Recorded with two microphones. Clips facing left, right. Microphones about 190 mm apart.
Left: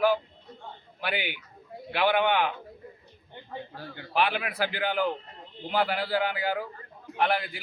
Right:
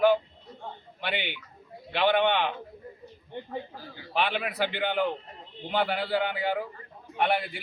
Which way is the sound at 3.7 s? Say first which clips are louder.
Left 3 dB; 65° left (ahead or behind).